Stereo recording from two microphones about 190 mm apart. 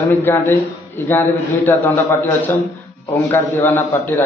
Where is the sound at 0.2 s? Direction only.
10° left (ahead or behind).